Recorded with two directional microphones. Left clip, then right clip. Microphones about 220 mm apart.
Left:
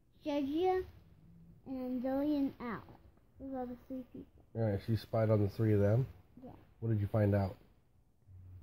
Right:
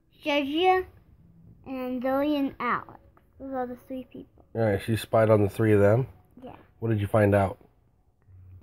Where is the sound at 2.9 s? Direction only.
15° right (ahead or behind).